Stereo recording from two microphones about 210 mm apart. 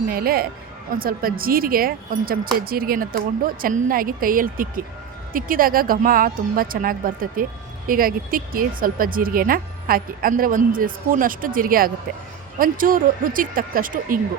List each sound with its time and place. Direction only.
0.1 s speech: 45° right (ahead or behind)